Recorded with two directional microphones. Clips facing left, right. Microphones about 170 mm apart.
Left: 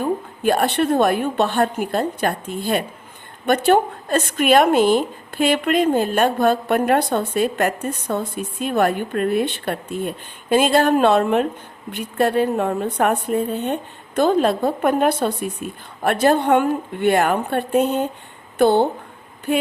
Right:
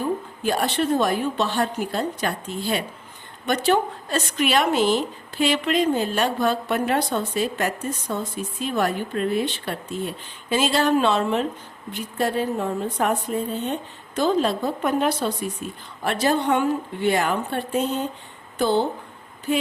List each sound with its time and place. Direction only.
0.0 s a woman's voice: 55° left (ahead or behind)